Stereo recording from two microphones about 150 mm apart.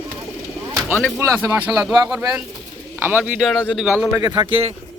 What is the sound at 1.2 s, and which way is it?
Speech, 20° right (ahead or behind).